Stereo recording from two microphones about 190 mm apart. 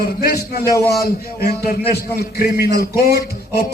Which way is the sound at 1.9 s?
55° left (ahead or behind).